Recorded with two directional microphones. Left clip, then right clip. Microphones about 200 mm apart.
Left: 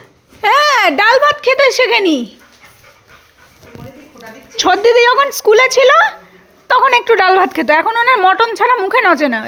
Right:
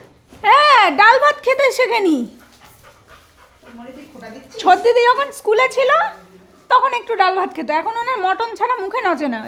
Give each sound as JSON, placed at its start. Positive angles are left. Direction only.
{"t": 0.4, "sound": "a sound", "side_deg": 20}
{"t": 0.9, "sound": "speech", "side_deg": 0}
{"t": 4.5, "sound": "a woman's voice", "side_deg": 10}